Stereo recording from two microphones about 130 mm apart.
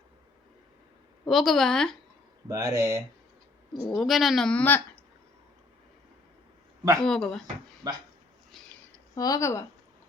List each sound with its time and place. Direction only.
1.3 s speech: centre (ahead or behind)
2.5 s speech: 20° right (ahead or behind)
3.8 s speech: centre (ahead or behind)
7.0 s speech: 5° left (ahead or behind)
7.8 s speech: 30° right (ahead or behind)
9.1 s speech: 25° left (ahead or behind)